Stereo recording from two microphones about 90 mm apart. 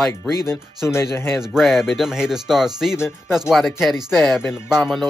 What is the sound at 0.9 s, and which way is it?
Speech, 30° left (ahead or behind).